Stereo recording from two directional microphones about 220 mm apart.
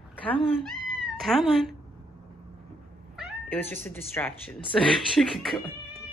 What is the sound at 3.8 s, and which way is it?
Speech, 10° left (ahead or behind).